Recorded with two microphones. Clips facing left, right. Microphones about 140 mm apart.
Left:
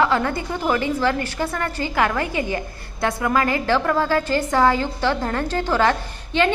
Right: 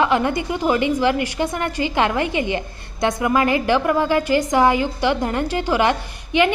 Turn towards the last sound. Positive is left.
turn(degrees=-15)  # may be behind; listen again after turning